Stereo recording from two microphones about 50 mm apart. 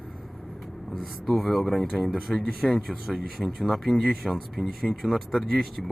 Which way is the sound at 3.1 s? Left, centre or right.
Centre.